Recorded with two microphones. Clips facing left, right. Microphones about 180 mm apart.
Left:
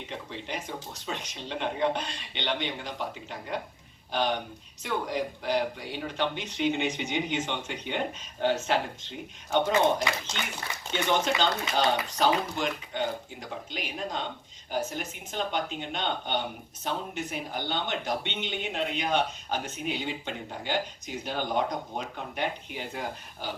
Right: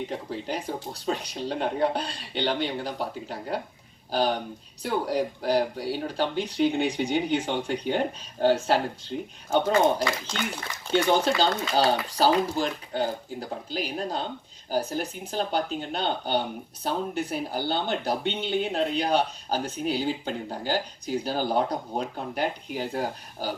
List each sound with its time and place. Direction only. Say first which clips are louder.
0.1 s speech: right 5 dB; 40° right (ahead or behind)
10.9 s speech: right 5 dB; 35° right (ahead or behind)